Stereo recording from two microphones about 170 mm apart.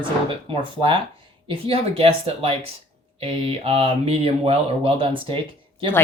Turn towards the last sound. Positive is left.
turn(degrees=-30)  # may be behind; listen again after turning